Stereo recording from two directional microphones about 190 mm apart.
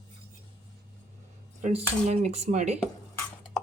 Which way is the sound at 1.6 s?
40° right (ahead or behind).